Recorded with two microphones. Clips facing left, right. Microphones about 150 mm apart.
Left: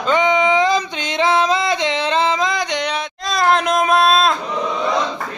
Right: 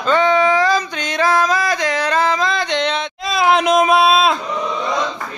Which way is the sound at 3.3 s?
5° right (ahead or behind).